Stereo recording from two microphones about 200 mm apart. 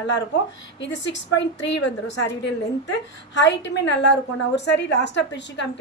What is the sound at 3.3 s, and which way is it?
A woman's voice, 65° left (ahead or behind).